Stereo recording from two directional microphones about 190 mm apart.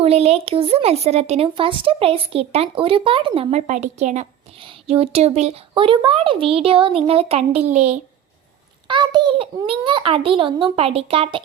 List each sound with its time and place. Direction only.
0.0 s speech: 35° right (ahead or behind)
8.9 s a child's voice: 25° right (ahead or behind)